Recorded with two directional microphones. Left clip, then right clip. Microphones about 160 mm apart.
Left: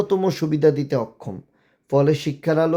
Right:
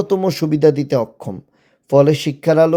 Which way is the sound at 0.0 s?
25° right (ahead or behind).